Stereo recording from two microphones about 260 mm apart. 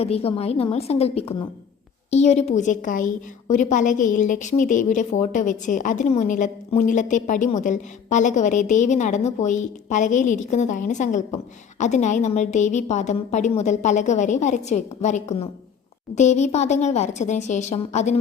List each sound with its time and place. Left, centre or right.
0.0 s a woman's voice: left